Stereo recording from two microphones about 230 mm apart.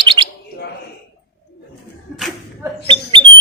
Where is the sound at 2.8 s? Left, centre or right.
Right.